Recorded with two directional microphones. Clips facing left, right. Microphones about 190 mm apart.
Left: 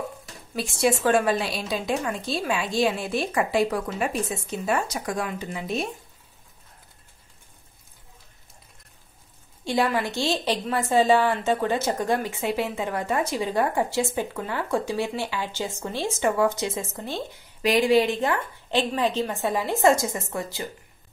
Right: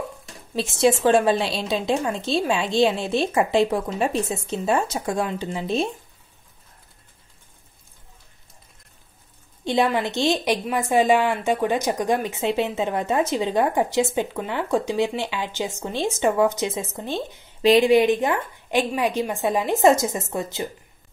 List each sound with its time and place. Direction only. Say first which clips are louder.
0.6 s a woman's voice: right 4 dB; 20° right (ahead or behind)
9.7 s a woman's voice: right 3 dB; 20° right (ahead or behind)